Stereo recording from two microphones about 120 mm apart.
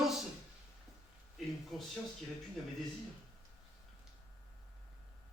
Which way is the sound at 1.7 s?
Centre (ahead or behind).